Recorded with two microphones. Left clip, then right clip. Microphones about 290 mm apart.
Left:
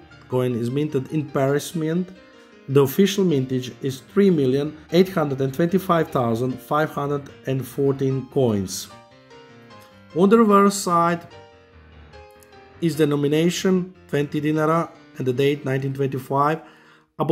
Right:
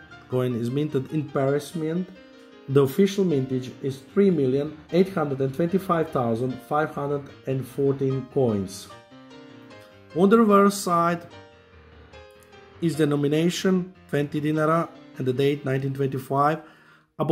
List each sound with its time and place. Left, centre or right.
0.3 s speech: centre
10.1 s speech: centre
12.8 s speech: centre